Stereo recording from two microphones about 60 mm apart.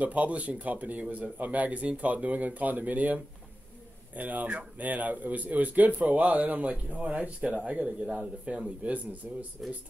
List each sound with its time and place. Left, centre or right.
0.0 s speech: right